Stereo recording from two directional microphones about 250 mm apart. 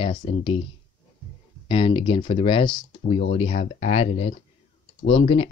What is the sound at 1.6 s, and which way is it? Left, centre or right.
Speech, left.